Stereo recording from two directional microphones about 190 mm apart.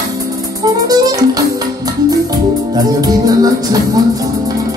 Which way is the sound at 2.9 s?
20° right (ahead or behind).